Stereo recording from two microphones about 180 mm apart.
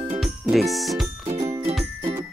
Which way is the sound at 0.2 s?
Centre (ahead or behind).